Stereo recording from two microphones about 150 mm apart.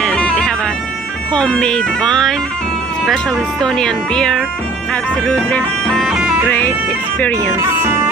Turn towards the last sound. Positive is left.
turn(degrees=10)  # may be behind; listen again after turning